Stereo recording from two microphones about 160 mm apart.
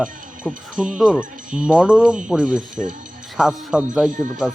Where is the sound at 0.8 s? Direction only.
5° right (ahead or behind).